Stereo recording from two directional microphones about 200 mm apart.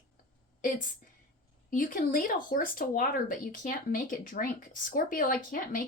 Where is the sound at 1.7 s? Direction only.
40° left (ahead or behind).